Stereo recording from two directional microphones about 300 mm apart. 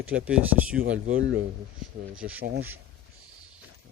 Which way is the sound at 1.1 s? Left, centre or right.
Right.